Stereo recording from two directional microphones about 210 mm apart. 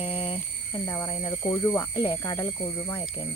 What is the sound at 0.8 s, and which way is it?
Speech, 10° left (ahead or behind).